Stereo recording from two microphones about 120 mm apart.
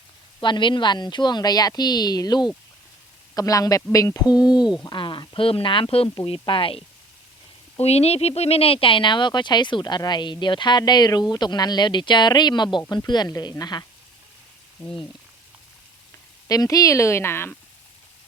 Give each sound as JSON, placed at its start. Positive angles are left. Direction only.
{"t": 0.4, "sound": "speech", "side_deg": 40}
{"t": 4.3, "sound": "speech", "side_deg": -10}
{"t": 4.9, "sound": "speech", "side_deg": 45}
{"t": 7.8, "sound": "speech", "side_deg": 60}
{"t": 16.5, "sound": "speech", "side_deg": 30}